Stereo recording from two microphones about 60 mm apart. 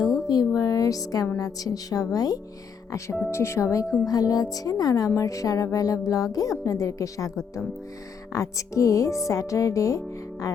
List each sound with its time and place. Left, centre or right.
0.3 s a sound: left
1.4 s speech: left
3.2 s speech: left
3.8 s speech: centre
4.1 s speech: left
5.1 s a woman's voice: left